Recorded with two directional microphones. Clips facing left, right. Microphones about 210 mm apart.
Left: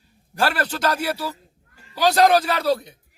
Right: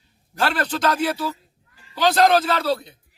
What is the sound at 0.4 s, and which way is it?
Speech, 5° left (ahead or behind).